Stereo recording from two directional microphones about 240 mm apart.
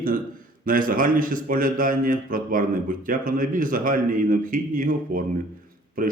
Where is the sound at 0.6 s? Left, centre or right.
Right.